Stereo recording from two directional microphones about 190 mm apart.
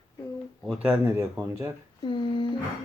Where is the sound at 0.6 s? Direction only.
5° right (ahead or behind).